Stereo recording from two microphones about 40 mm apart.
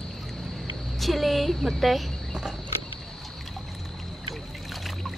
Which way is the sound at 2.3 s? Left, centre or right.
Centre.